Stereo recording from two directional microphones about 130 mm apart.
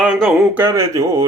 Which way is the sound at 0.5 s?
20° right (ahead or behind).